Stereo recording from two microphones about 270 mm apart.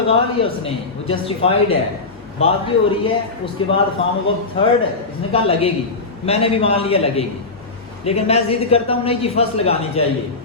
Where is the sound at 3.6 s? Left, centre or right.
Centre.